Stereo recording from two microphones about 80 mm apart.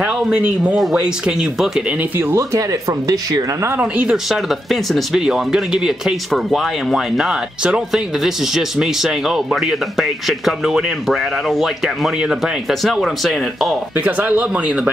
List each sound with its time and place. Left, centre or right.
0.0 s speech: centre
2.0 s speech: right
2.3 s speech: right
3.8 s speech: centre
4.3 s speech: centre
13.9 s speech: centre